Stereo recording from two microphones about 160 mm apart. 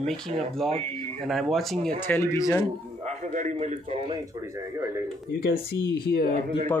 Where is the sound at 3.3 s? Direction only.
50° right (ahead or behind).